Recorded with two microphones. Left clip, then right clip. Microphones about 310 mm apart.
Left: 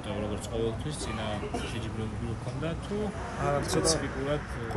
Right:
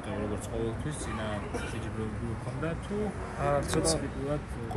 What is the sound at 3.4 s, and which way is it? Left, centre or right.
Speech, centre.